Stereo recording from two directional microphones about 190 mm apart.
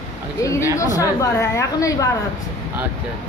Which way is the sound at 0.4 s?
15° left (ahead or behind).